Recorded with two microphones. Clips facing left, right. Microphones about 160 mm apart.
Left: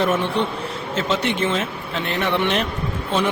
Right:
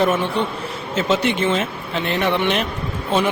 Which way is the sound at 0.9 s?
5° right (ahead or behind).